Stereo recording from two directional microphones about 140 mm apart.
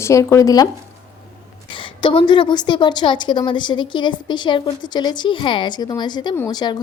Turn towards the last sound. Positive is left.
turn(degrees=30)  # may be behind; listen again after turning